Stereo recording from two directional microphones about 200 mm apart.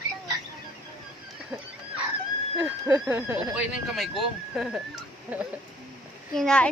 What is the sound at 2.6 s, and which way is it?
A man's voice, 10° right (ahead or behind).